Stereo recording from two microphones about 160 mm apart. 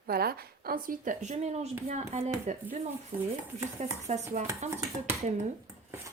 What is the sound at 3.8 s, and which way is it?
Speech, 50° right (ahead or behind).